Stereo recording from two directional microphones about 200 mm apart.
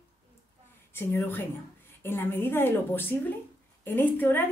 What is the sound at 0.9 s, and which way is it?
A woman's voice, 10° left (ahead or behind).